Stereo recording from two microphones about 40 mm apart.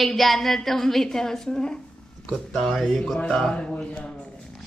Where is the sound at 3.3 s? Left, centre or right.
Centre.